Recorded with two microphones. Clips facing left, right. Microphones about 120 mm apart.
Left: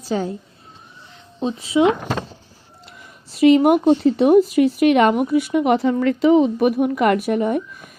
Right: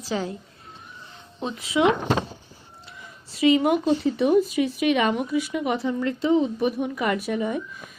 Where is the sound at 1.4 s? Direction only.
30° left (ahead or behind).